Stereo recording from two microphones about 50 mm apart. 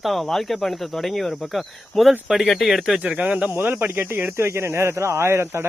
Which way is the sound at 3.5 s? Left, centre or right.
Right.